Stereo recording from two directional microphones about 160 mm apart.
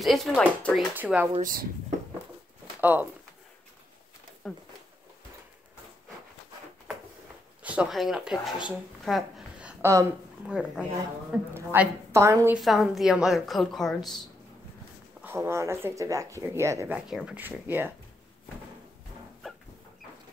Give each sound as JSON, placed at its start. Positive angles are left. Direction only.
{"t": 0.0, "sound": "a woman's voice", "side_deg": 0}
{"t": 0.9, "sound": "speech", "side_deg": -10}
{"t": 1.4, "sound": "speech", "side_deg": -65}
{"t": 2.8, "sound": "speech", "side_deg": -10}
{"t": 4.4, "sound": "a woman's voice", "side_deg": 0}
{"t": 7.6, "sound": "speech", "side_deg": -10}
{"t": 11.3, "sound": "speech", "side_deg": -10}
{"t": 12.5, "sound": "a woman's voice", "side_deg": 0}
{"t": 15.2, "sound": "speech", "side_deg": -15}